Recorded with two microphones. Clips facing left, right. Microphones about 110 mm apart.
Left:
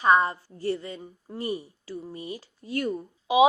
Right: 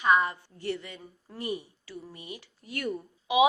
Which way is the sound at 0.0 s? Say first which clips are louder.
Left 3 dB; 35° left (ahead or behind).